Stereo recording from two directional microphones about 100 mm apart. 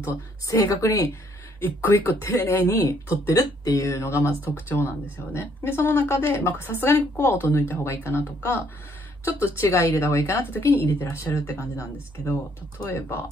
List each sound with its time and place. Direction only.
0.5 s a woman's voice: 30° left (ahead or behind)